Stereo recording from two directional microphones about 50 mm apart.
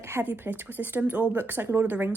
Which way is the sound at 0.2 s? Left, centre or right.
Right.